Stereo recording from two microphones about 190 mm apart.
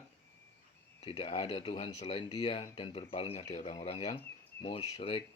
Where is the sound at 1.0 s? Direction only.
30° left (ahead or behind).